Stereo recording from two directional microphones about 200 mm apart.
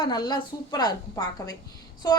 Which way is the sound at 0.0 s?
20° left (ahead or behind).